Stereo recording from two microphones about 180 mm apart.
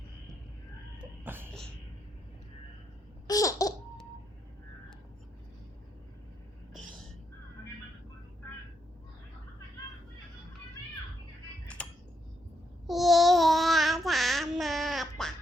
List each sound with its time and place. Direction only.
1.2 s music: 10° right (ahead or behind)
3.2 s laughter: 20° left (ahead or behind)
11.8 s a sound: 5° left (ahead or behind)
12.9 s child singing: centre (ahead or behind)